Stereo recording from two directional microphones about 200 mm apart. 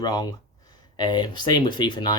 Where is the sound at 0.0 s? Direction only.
20° left (ahead or behind).